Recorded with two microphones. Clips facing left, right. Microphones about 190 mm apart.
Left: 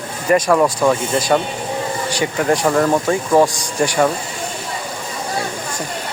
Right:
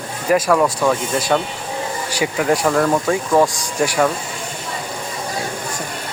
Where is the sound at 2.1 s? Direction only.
5° right (ahead or behind).